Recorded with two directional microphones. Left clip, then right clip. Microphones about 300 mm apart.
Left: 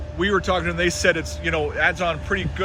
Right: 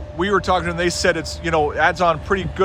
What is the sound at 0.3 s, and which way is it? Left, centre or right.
A man's voice, centre.